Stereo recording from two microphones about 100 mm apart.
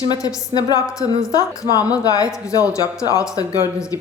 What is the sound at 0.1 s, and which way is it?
A woman's voice, 35° left (ahead or behind).